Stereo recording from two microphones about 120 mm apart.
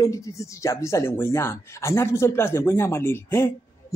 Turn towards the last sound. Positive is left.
turn(degrees=20)  # may be behind; listen again after turning